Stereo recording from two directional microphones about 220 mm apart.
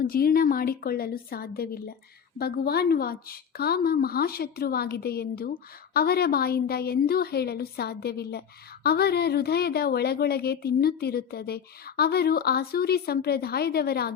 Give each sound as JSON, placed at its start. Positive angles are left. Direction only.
{"t": 0.0, "sound": "a woman's voice", "side_deg": 40}